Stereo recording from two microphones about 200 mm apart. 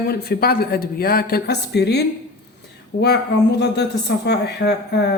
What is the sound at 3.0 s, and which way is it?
Speech, 60° left (ahead or behind).